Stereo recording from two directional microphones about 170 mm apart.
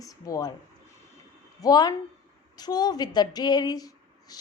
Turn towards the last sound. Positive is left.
turn(degrees=20)  # may be behind; listen again after turning